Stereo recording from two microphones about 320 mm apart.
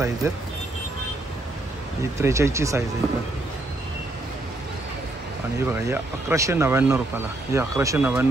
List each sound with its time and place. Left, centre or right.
0.2 s speech: centre
2.1 s speech: centre
5.7 s speech: centre